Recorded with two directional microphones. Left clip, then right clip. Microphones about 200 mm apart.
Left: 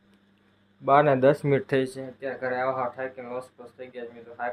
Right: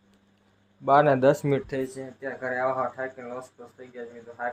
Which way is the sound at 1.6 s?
50° left (ahead or behind).